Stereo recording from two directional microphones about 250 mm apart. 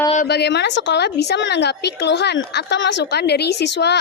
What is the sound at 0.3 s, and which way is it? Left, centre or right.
A woman's voice, left.